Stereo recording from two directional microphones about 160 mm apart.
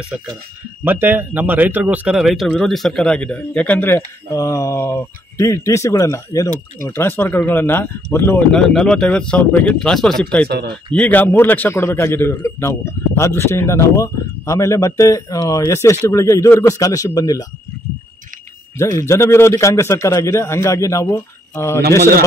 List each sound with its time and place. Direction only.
0.8 s a man's voice: 10° right (ahead or behind); by 17.5 s 20° left (ahead or behind)
18.8 s a man's voice: 20° left (ahead or behind)